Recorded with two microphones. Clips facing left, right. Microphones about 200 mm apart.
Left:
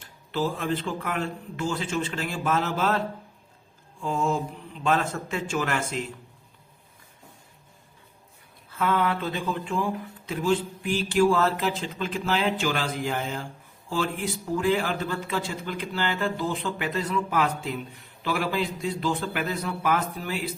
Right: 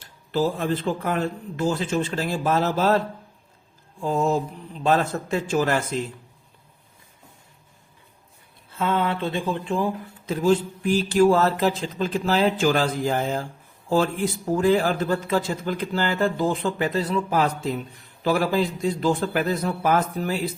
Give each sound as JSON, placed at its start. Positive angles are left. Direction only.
{"t": 0.0, "sound": "a man's voice", "side_deg": -40}
{"t": 4.0, "sound": "a man's voice", "side_deg": -40}
{"t": 8.7, "sound": "mantra", "side_deg": -25}
{"t": 10.2, "sound": "a man's voice", "side_deg": -40}